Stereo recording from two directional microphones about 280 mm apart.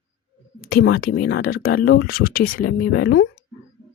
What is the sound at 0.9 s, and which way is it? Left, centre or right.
Speech, left.